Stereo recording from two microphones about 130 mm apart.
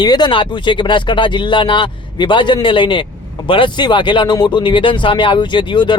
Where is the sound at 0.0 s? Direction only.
35° left (ahead or behind).